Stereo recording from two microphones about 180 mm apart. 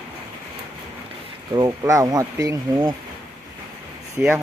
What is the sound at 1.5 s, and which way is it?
Speech, 20° right (ahead or behind).